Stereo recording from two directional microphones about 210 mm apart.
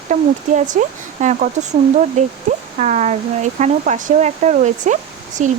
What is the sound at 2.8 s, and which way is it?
Speech, 35° right (ahead or behind).